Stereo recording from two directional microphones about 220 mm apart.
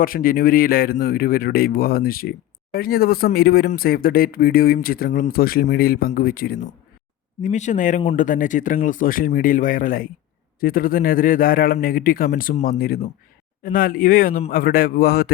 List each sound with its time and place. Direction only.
0.0 s speech: 40° left (ahead or behind)